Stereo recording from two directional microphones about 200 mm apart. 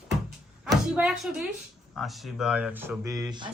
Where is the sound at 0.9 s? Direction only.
5° right (ahead or behind); by 3.5 s 20° right (ahead or behind).